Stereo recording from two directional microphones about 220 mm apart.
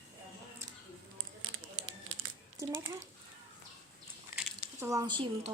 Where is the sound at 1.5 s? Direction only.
20° left (ahead or behind).